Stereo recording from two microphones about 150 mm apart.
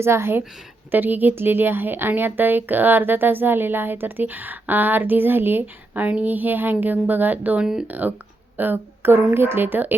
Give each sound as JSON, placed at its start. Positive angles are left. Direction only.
{"t": 0.0, "sound": "speech", "side_deg": -15}